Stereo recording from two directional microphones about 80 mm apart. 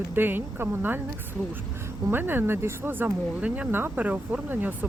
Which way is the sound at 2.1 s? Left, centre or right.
Right.